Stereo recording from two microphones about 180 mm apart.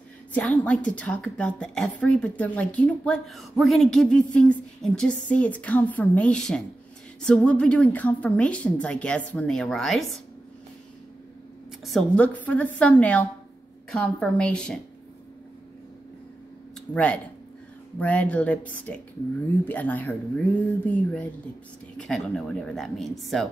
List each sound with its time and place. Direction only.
0.3 s a woman's voice: 5° left (ahead or behind)
11.8 s a woman's voice: 5° left (ahead or behind)
16.9 s a woman's voice: 5° left (ahead or behind)